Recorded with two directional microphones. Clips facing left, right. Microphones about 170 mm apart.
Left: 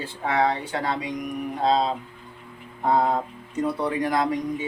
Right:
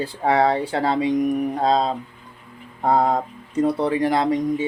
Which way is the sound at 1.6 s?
40° right (ahead or behind).